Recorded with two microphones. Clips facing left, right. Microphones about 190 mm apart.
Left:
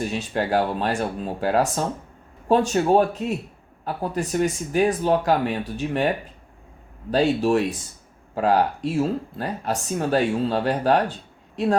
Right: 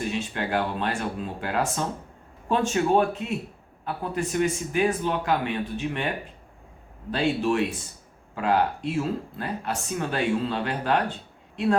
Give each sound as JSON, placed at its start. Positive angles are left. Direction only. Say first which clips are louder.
{"t": 0.1, "sound": "speech", "louder": "left 4 dB", "side_deg": 40}
{"t": 7.1, "sound": "speech", "louder": "left 5 dB", "side_deg": 40}